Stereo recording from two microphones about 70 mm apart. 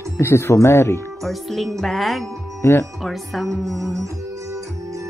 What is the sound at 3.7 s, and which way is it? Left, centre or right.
Music, right.